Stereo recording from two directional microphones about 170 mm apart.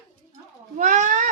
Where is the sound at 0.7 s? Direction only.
45° right (ahead or behind).